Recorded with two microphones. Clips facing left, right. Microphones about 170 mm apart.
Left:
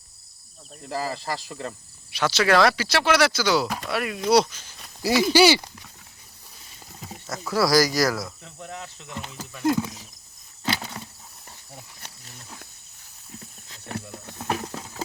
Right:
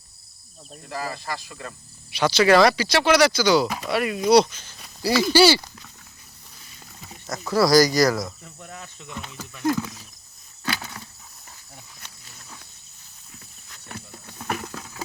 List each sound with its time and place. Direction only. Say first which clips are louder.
0.9 s speech: left 2 dB; 35° left (ahead or behind)
2.1 s speech: right 3 dB; centre (ahead or behind)
5.0 s speech: even; 20° left (ahead or behind)
7.3 s speech: right 3 dB; centre (ahead or behind)
8.6 s speech: left 3 dB; 20° left (ahead or behind)
10.6 s a sound: left 2 dB; 20° left (ahead or behind)
13.8 s wild animals: left 6 dB; 55° left (ahead or behind)
14.3 s a sound: left 1 dB; 25° left (ahead or behind)